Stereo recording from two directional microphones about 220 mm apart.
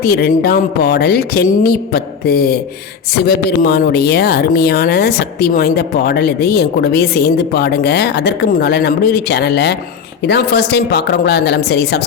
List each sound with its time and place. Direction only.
0.0 s speech: 45° left (ahead or behind)